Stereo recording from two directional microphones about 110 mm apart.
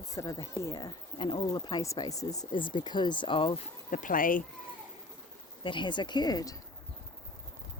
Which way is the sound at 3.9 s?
90° left.